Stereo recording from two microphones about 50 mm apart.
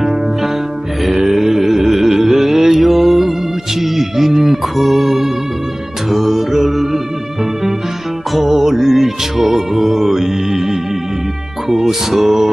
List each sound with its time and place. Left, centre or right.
1.0 s a sound: centre
3.8 s music: centre
6.0 s mantra: centre
8.6 s music: centre